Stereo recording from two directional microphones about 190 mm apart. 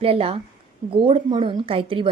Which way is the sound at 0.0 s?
30° right (ahead or behind).